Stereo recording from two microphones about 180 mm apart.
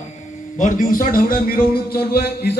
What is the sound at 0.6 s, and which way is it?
A man's voice, 45° left (ahead or behind).